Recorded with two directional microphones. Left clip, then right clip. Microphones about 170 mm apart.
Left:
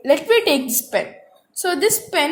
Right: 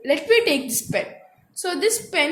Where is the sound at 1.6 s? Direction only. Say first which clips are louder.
Left 3 dB; 20° left (ahead or behind).